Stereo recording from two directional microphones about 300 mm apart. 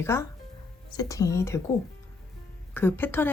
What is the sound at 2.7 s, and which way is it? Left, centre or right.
Speech, centre.